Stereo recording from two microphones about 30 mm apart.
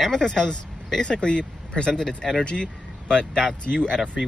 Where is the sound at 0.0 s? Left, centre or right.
Centre.